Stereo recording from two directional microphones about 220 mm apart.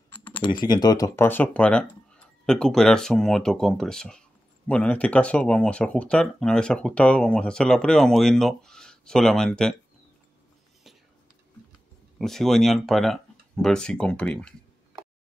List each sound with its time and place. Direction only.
0.3 s speech: 20° left (ahead or behind); by 9.8 s 5° left (ahead or behind)
12.2 s speech: centre (ahead or behind)